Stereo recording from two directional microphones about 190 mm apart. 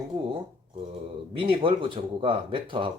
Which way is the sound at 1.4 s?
25° right (ahead or behind).